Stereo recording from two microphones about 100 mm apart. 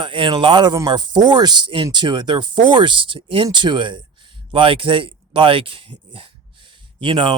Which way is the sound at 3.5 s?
50° right (ahead or behind).